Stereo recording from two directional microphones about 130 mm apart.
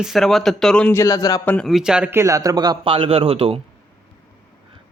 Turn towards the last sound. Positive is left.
turn(degrees=-45)  # may be behind; listen again after turning